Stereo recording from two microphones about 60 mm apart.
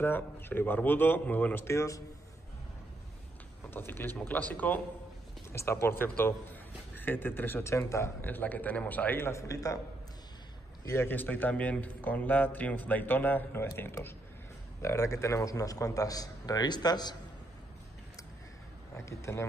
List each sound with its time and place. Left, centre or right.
0.0 s speech: left
1.7 s a man's voice: left
3.7 s speech: left
5.5 s speech: left
7.6 s speech: left
8.2 s a man's voice: left
9.2 s a man's voice: left
11.1 s a man's voice: left
14.8 s a man's voice: left
19.0 s a man's voice: left